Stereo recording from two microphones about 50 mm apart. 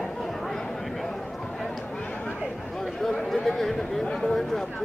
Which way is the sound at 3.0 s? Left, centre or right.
Centre.